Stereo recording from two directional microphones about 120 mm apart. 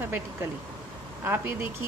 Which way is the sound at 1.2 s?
20° right (ahead or behind).